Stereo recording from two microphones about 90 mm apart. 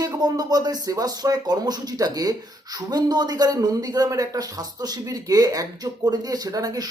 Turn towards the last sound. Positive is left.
turn(degrees=-45)  # may be behind; listen again after turning